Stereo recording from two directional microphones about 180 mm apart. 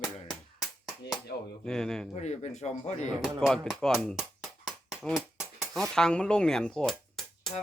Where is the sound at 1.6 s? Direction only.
5° left (ahead or behind).